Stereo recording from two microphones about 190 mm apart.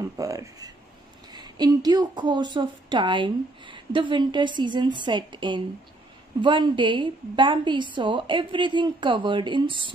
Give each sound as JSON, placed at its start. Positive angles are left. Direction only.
{"t": 0.2, "sound": "speech", "side_deg": -15}